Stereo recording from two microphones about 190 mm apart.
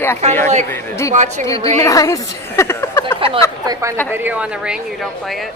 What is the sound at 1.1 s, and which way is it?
Speech, 40° right (ahead or behind).